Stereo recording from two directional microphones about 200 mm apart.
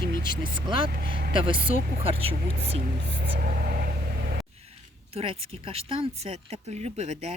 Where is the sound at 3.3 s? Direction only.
45° right (ahead or behind).